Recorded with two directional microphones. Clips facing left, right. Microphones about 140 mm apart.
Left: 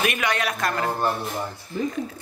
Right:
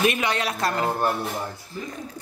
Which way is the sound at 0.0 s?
30° right (ahead or behind).